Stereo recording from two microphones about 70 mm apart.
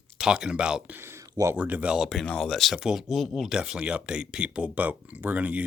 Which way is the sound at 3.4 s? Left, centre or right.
Centre.